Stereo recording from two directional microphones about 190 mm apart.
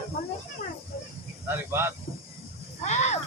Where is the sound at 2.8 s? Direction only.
35° left (ahead or behind).